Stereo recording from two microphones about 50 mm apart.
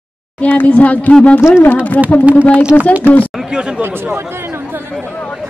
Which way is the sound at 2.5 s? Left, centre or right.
Right.